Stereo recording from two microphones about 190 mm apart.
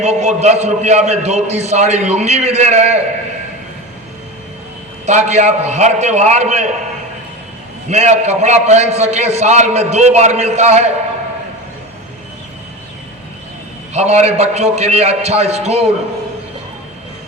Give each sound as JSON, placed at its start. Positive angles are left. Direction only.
{"t": 0.0, "sound": "a man's voice", "side_deg": -35}
{"t": 5.0, "sound": "a man's voice", "side_deg": -35}
{"t": 7.9, "sound": "a man's voice", "side_deg": -35}
{"t": 13.9, "sound": "a man's voice", "side_deg": -35}